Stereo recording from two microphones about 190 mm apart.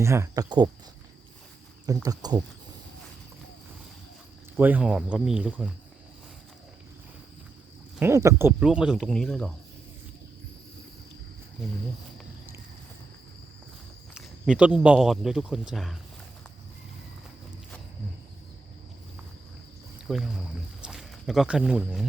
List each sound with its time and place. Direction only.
0.0 s speech: 15° right (ahead or behind)
2.0 s speech: 20° right (ahead or behind)
4.5 s speech: 5° right (ahead or behind)
7.9 s speech: 15° right (ahead or behind); by 9.6 s 5° left (ahead or behind)
14.1 s a man's voice: 5° right (ahead or behind)
20.1 s speech: centre (ahead or behind)